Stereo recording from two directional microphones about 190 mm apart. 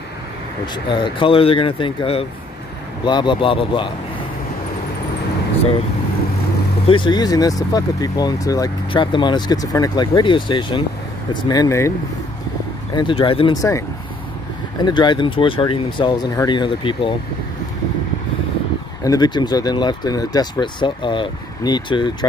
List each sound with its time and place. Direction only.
0.8 s speech: 25° left (ahead or behind)
6.9 s speech: 25° left (ahead or behind)
12.9 s speech: 25° left (ahead or behind)
19.0 s speech: 20° left (ahead or behind)